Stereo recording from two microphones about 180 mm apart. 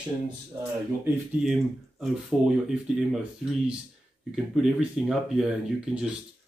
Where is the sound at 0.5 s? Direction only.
15° right (ahead or behind).